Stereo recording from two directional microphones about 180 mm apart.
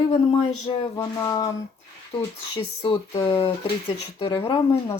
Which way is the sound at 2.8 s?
30° left (ahead or behind).